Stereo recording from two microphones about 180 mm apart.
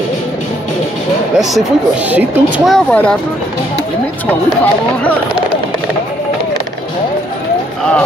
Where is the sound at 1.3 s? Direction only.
Centre (ahead or behind).